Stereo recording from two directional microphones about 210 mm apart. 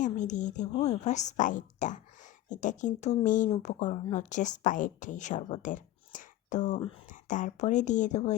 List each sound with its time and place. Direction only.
0.0 s speech: 35° left (ahead or behind)